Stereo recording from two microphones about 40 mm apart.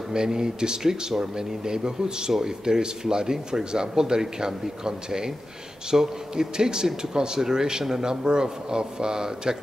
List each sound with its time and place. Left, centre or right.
0.1 s speech: centre